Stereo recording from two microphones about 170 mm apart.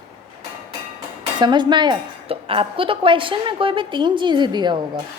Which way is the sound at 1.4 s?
25° right (ahead or behind).